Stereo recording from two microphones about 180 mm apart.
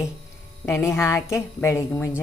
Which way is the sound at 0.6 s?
15° left (ahead or behind).